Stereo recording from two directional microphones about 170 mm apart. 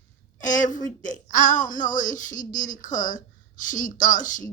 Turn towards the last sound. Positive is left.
turn(degrees=50)  # may be behind; listen again after turning